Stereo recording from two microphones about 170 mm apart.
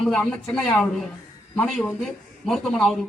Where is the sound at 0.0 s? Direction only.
Centre (ahead or behind).